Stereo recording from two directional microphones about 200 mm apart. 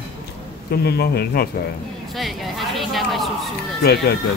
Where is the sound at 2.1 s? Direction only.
Centre (ahead or behind).